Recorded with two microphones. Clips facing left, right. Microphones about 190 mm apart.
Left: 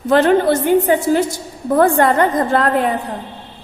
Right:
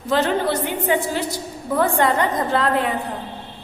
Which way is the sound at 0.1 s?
55° left (ahead or behind).